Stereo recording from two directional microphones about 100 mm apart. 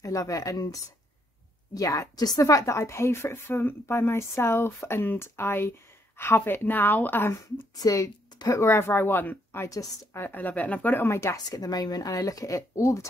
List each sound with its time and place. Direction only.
0.0 s a woman's voice: 35° left (ahead or behind)
7.7 s a woman's voice: 40° left (ahead or behind)